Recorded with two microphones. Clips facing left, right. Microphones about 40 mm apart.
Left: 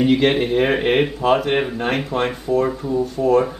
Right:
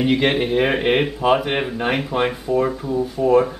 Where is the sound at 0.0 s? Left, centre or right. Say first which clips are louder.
Left 2 dB; centre.